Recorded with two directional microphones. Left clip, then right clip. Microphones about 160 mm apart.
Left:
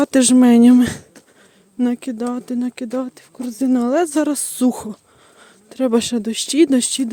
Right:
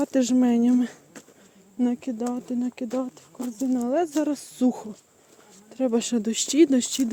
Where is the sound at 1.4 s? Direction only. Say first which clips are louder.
Left 5 dB; 45° left (ahead or behind).